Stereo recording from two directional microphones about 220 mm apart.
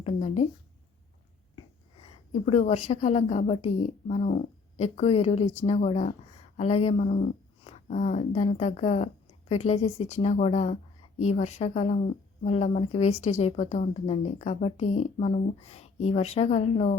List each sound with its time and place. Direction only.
0.0 s a woman's voice: 30° left (ahead or behind)
2.3 s a woman's voice: 30° left (ahead or behind)